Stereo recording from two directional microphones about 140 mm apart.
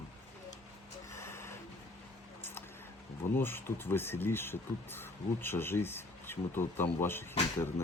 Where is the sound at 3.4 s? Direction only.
15° left (ahead or behind).